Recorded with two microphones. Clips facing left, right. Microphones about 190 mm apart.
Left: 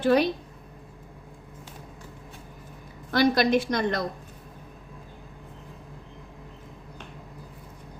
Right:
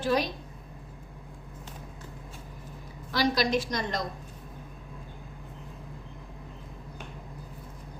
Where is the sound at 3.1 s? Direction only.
55° left (ahead or behind).